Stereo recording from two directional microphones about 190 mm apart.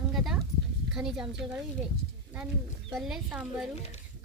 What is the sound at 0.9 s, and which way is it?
Speech, 5° right (ahead or behind).